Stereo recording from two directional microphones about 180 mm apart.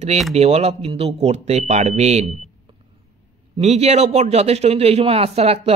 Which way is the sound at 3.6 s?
35° right (ahead or behind).